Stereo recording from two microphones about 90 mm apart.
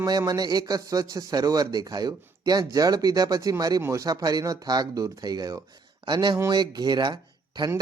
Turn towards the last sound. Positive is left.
turn(degrees=-55)  # may be behind; listen again after turning